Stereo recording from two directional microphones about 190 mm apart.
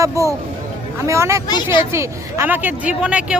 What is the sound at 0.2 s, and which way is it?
A woman's voice, 15° right (ahead or behind).